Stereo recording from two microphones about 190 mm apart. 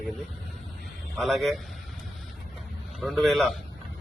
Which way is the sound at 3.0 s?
Centre (ahead or behind).